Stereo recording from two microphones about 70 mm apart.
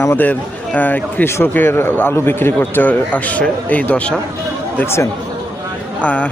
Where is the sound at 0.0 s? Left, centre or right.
Left.